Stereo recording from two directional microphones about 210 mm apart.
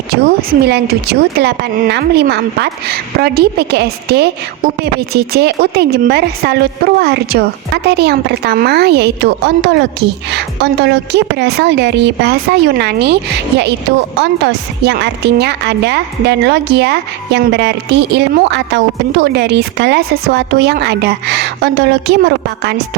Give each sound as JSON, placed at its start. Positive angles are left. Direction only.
{"t": 0.1, "sound": "speech", "side_deg": -50}